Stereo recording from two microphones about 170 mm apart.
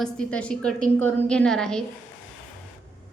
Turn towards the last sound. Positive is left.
turn(degrees=5)  # may be behind; listen again after turning